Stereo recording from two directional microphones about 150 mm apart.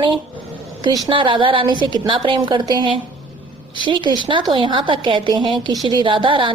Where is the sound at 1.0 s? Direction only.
35° right (ahead or behind).